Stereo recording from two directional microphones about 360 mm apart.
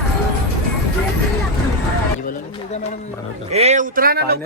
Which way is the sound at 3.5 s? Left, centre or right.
Centre.